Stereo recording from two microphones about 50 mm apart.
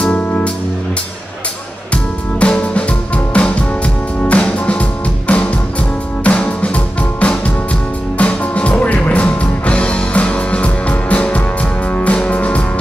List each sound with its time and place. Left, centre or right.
0.0 s music: left
2.4 s music: left